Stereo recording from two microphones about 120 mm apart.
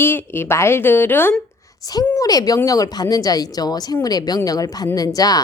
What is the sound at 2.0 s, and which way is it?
A woman's voice, 30° left (ahead or behind).